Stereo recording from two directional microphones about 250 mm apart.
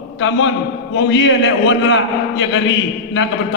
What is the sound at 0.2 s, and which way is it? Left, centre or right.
A man's voice, left.